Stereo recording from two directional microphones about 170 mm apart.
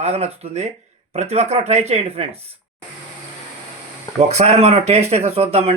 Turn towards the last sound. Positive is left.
turn(degrees=-35)  # may be behind; listen again after turning